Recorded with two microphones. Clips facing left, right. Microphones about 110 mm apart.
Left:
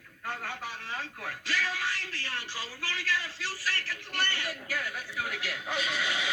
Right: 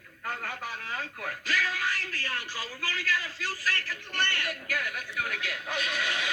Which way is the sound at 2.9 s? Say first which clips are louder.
Right 1 dB; 50° right (ahead or behind).